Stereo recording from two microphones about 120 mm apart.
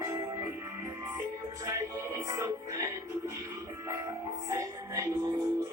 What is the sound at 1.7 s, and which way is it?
Music, 25° right (ahead or behind).